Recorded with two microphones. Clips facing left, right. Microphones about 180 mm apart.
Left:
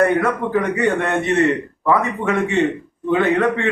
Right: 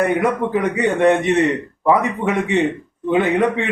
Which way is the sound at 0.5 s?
15° right (ahead or behind).